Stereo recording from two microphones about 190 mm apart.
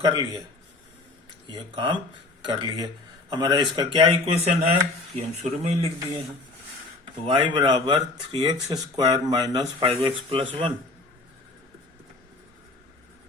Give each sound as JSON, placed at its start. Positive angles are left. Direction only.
{"t": 0.0, "sound": "a man's voice", "side_deg": -20}
{"t": 1.5, "sound": "a man's voice", "side_deg": -25}
{"t": 7.0, "sound": "a man's voice", "side_deg": -25}